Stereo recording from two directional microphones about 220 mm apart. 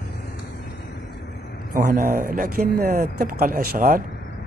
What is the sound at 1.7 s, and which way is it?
Speech, 35° right (ahead or behind).